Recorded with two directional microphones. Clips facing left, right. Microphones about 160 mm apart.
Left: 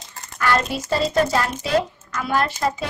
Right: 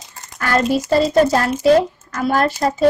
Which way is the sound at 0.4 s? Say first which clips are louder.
Right 4 dB; 40° right (ahead or behind).